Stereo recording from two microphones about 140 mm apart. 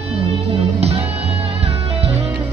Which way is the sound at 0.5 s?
45° right (ahead or behind).